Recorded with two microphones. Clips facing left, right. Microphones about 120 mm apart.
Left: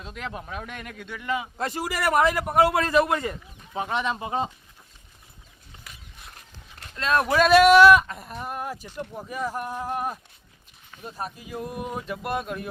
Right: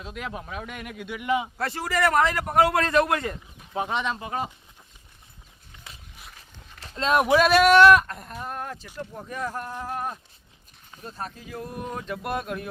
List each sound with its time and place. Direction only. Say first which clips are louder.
0.0 s a man's voice: right 1 dB; 5° right (ahead or behind)
1.5 s a man's voice: right 2 dB; 15° left (ahead or behind)
4.2 s speech: left 3 dB; 25° left (ahead or behind)
6.1 s walk: left 1 dB; centre (ahead or behind)
6.9 s speech: right 1 dB; 20° right (ahead or behind)
7.3 s a man's voice: left 3 dB; 5° right (ahead or behind)